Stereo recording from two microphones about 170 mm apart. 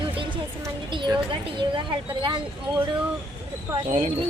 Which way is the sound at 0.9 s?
25° right (ahead or behind).